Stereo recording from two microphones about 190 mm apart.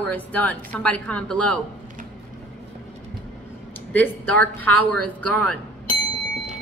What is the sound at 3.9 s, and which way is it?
A woman's voice, 10° left (ahead or behind).